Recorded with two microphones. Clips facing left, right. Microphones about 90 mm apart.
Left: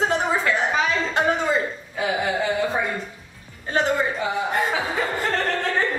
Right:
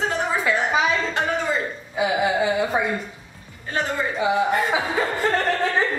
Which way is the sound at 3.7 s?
20° left (ahead or behind).